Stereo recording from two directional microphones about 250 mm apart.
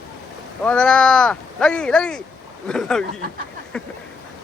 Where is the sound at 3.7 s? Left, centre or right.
Centre.